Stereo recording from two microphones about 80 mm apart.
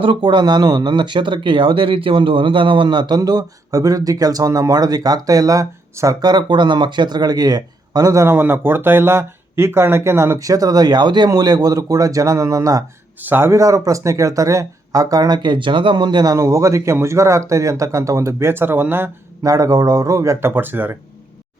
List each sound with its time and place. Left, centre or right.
0.0 s speech: right
6.2 s speech: right
13.2 s speech: right
13.5 s speech: right
16.3 s speech: right
19.4 s speech: right
20.5 s speech: right